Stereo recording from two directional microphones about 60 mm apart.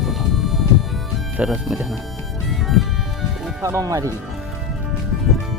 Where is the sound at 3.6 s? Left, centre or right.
Right.